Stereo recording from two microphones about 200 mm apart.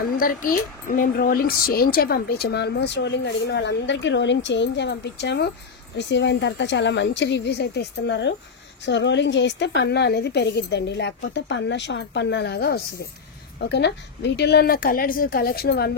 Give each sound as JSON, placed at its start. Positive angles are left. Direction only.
{"t": 0.2, "sound": "a woman's voice", "side_deg": 40}